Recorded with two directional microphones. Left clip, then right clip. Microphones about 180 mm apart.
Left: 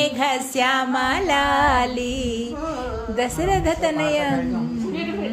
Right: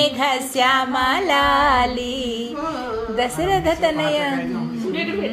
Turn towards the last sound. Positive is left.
turn(degrees=30)  # may be behind; listen again after turning